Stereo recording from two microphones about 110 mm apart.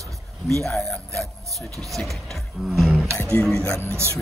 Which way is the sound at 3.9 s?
25° right (ahead or behind).